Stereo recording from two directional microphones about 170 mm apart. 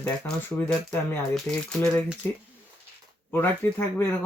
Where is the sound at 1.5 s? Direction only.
15° left (ahead or behind).